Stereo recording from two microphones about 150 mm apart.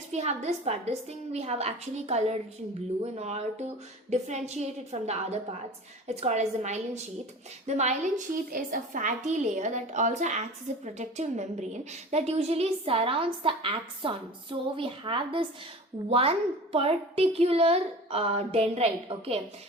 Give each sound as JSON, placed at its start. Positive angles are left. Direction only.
{"t": 0.1, "sound": "a woman's voice", "side_deg": -50}
{"t": 8.2, "sound": "a woman's voice", "side_deg": -65}